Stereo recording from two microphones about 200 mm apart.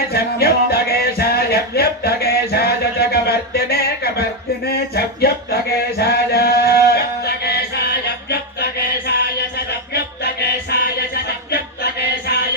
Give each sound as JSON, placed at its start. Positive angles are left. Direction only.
{"t": 0.1, "sound": "music", "side_deg": 50}
{"t": 9.1, "sound": "music", "side_deg": 55}
{"t": 10.4, "sound": "music", "side_deg": 55}